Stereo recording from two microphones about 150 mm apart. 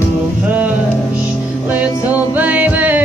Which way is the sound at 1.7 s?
10° right (ahead or behind).